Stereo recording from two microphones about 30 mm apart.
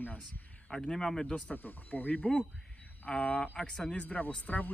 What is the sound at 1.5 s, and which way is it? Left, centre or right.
Speech, left.